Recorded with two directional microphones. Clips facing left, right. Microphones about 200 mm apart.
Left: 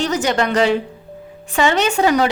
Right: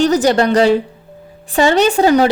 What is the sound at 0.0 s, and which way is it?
A woman's voice, 35° right (ahead or behind).